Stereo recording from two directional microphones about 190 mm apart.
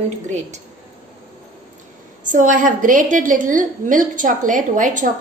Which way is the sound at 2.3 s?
45° right (ahead or behind).